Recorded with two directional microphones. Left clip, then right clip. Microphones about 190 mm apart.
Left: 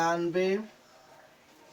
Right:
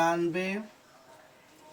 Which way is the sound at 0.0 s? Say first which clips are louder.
Even; 25° right (ahead or behind).